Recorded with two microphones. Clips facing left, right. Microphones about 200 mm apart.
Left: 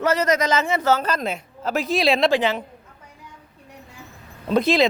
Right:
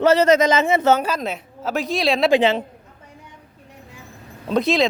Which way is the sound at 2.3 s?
25° right (ahead or behind).